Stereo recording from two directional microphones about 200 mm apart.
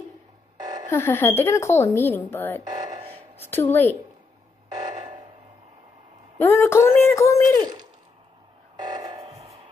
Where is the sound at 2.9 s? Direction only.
30° right (ahead or behind).